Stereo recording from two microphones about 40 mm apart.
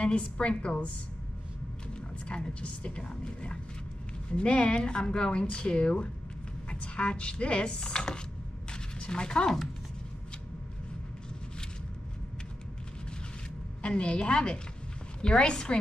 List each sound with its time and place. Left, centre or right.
0.0 s speech: left
2.0 s speech: left
8.6 s a sound: left
13.8 s speech: left